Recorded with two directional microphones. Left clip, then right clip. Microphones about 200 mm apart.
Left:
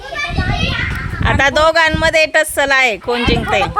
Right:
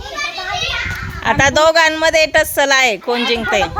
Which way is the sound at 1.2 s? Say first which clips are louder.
Even; centre (ahead or behind).